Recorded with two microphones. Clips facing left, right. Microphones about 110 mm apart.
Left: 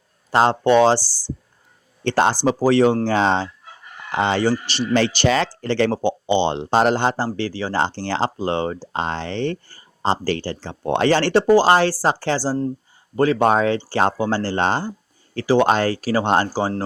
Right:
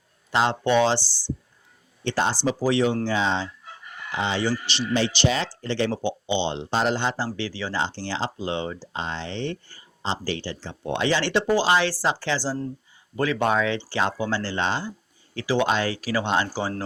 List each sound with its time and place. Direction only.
0.3 s speech: 40° left (ahead or behind)
2.0 s speech: 55° left (ahead or behind)
16.5 s speech: 35° left (ahead or behind)